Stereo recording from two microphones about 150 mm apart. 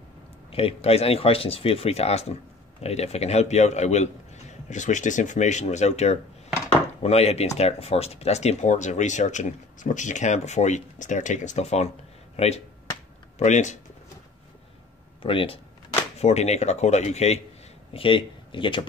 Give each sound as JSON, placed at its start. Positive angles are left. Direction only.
{"t": 0.5, "sound": "speech", "side_deg": 40}
{"t": 15.2, "sound": "speech", "side_deg": 35}
{"t": 17.9, "sound": "speech", "side_deg": 35}